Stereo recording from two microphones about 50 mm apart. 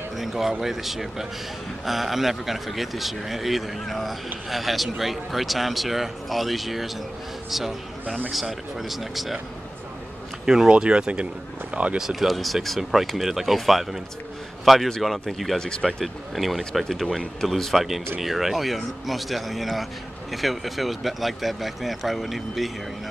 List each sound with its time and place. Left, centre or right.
0.2 s speech: centre
8.3 s speech: centre
10.4 s speech: centre
12.0 s a man's voice: centre
15.6 s speech: centre
16.0 s speech: centre